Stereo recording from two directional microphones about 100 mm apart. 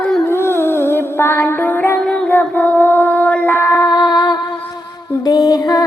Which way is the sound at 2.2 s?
20° left (ahead or behind).